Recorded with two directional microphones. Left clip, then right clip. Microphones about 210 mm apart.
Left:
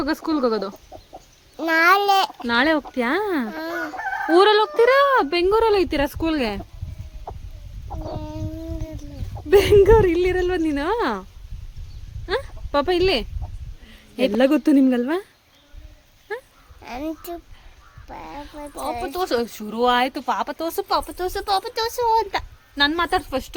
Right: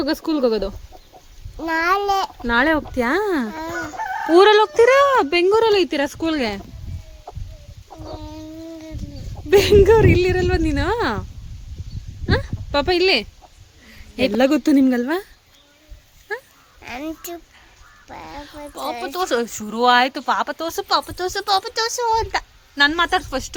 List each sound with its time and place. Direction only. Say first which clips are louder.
0.0 s speech: right 2 dB; 5° right (ahead or behind)
1.5 s a child's voice: left 3 dB; 20° left (ahead or behind)
2.5 s speech: right 4 dB; centre (ahead or behind)
3.5 s speech: even; 15° left (ahead or behind)
4.4 s speech: right 3 dB; centre (ahead or behind)
7.9 s chicken: left 2 dB; 20° left (ahead or behind)
9.5 s speech: right 1 dB; centre (ahead or behind)
16.3 s sheep: right 2 dB; 5° right (ahead or behind)
16.8 s speech: even; 10° left (ahead or behind)